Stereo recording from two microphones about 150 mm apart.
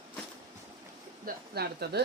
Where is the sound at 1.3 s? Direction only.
90° right.